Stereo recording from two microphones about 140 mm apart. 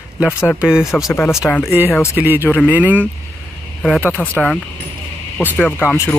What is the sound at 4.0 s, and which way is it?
Speech, 15° left (ahead or behind).